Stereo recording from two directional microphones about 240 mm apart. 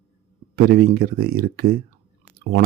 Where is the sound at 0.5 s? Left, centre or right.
Right.